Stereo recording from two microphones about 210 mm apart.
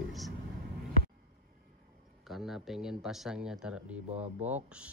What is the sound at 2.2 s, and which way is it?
Speech, centre (ahead or behind).